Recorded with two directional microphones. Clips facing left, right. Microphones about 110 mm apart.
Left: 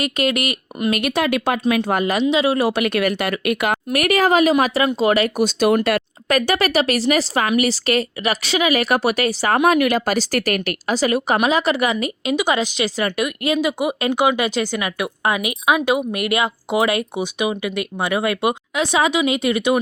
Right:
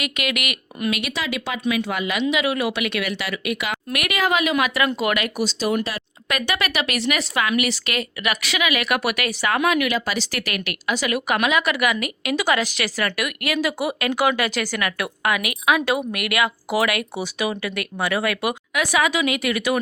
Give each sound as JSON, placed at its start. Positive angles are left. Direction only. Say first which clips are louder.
{"t": 0.0, "sound": "speech", "louder": "left 6 dB", "side_deg": 35}
{"t": 2.2, "sound": "speech", "louder": "left 3 dB", "side_deg": 30}
{"t": 3.9, "sound": "speech", "louder": "left 6 dB", "side_deg": 40}
{"t": 5.4, "sound": "speech", "louder": "left 6 dB", "side_deg": 55}
{"t": 6.2, "sound": "speech", "louder": "left 5 dB", "side_deg": 40}